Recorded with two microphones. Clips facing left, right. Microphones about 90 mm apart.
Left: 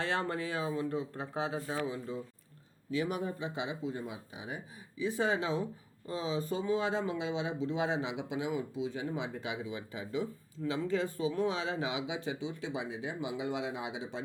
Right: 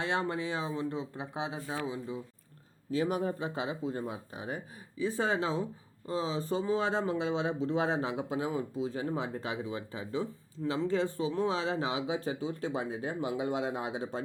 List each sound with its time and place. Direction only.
0.0 s speech: 20° right (ahead or behind)
2.9 s speech: 35° right (ahead or behind)